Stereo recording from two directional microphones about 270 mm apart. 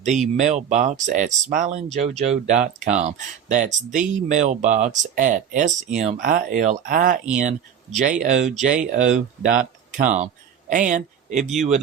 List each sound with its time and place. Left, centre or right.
0.0 s speech: right